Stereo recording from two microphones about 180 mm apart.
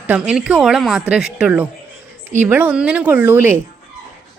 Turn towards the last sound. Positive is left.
turn(degrees=-10)  # may be behind; listen again after turning